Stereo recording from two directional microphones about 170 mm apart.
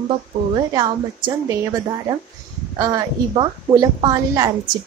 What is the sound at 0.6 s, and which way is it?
A woman's voice, 20° right (ahead or behind).